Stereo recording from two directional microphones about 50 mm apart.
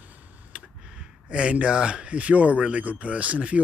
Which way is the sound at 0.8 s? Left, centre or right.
Centre.